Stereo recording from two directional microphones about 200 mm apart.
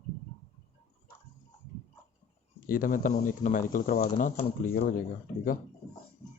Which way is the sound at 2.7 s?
45° left (ahead or behind).